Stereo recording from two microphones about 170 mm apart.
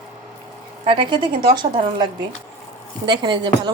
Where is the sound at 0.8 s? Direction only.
30° right (ahead or behind).